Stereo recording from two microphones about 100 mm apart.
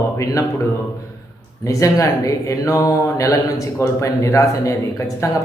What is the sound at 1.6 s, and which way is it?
Speech, 35° left (ahead or behind).